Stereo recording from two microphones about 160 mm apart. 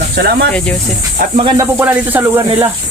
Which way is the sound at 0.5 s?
5° left (ahead or behind).